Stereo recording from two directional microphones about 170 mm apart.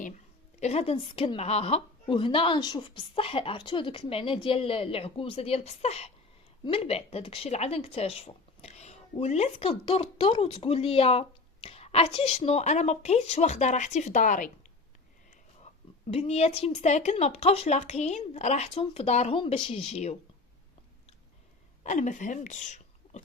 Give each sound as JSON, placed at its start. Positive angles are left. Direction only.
{"t": 0.6, "sound": "speech", "side_deg": 35}
{"t": 15.6, "sound": "speech", "side_deg": 40}
{"t": 21.8, "sound": "a woman's voice", "side_deg": 45}